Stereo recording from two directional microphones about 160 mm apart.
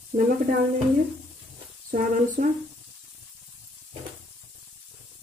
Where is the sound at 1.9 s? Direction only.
60° right (ahead or behind).